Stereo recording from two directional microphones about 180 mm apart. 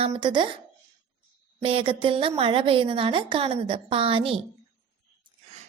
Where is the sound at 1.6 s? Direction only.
30° right (ahead or behind).